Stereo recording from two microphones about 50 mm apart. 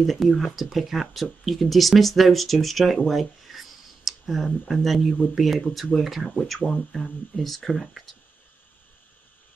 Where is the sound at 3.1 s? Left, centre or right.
Centre.